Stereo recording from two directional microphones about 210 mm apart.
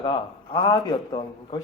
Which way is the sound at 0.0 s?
20° left (ahead or behind).